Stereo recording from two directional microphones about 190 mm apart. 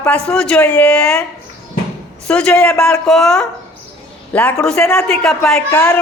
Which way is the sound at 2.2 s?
5° left (ahead or behind).